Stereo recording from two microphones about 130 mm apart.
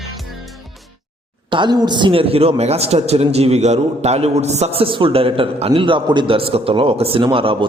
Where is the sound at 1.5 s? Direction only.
35° right (ahead or behind).